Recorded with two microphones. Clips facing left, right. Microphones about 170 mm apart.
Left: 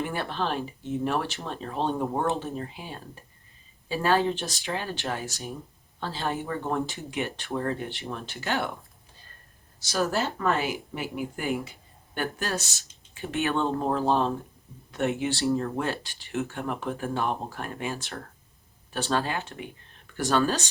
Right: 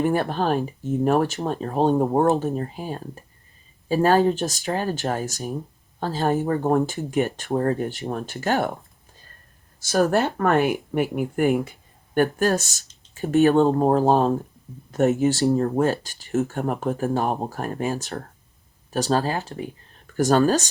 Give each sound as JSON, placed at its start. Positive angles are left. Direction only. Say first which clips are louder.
{"t": 0.0, "sound": "speech", "louder": "right 8 dB", "side_deg": -45}
{"t": 9.8, "sound": "speech", "louder": "right 7 dB", "side_deg": -50}